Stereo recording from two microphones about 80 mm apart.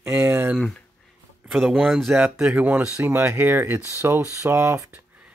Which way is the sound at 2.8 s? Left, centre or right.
Right.